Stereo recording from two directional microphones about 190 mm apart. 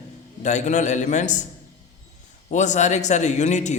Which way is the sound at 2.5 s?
40° left (ahead or behind).